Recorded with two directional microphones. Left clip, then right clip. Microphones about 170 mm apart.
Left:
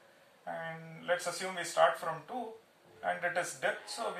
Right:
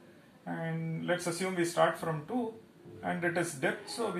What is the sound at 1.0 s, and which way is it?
Speech, 15° left (ahead or behind).